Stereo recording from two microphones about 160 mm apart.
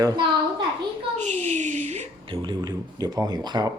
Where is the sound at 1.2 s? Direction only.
45° right (ahead or behind).